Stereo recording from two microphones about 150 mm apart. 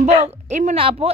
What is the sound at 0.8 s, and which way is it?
Speech, 35° right (ahead or behind).